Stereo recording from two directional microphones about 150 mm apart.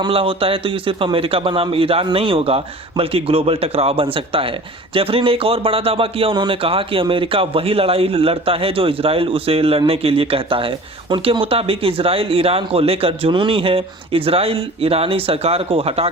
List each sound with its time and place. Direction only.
0.0 s speech: 40° right (ahead or behind)